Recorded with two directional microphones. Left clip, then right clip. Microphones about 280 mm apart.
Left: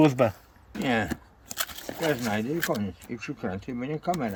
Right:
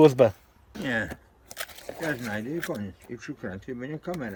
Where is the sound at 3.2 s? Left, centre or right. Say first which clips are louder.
Left 4 dB; centre.